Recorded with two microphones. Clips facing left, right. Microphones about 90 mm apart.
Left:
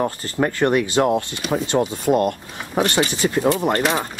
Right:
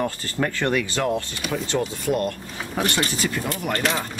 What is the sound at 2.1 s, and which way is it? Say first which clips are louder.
Speech: left 6 dB; 20° left (ahead or behind).